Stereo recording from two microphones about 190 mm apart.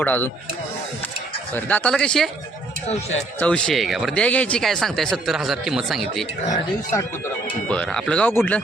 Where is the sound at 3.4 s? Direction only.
5° left (ahead or behind).